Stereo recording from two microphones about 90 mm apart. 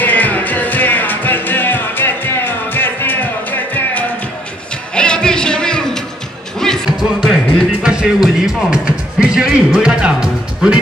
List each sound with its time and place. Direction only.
0.0 s music: 20° left (ahead or behind)
7.2 s music: 5° right (ahead or behind)